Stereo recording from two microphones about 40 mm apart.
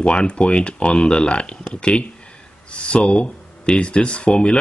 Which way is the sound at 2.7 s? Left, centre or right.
Left.